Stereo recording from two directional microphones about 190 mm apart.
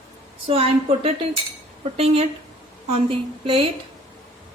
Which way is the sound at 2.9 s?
30° right (ahead or behind).